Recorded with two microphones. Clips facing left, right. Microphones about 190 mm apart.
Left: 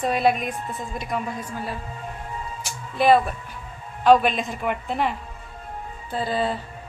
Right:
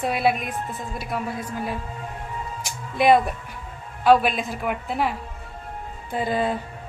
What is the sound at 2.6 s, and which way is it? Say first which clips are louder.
Music: even; 15° right (ahead or behind).